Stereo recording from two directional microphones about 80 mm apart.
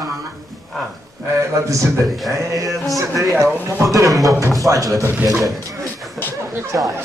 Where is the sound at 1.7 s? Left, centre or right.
Right.